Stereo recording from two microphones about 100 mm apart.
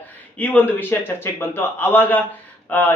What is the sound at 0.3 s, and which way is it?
Speech, 15° left (ahead or behind).